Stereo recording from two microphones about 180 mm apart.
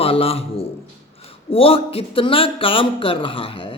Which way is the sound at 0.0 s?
35° left (ahead or behind).